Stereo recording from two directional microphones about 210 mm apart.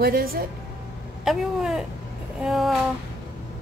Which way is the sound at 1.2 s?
Centre (ahead or behind).